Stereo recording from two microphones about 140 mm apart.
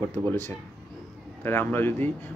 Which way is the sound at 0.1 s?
15° left (ahead or behind).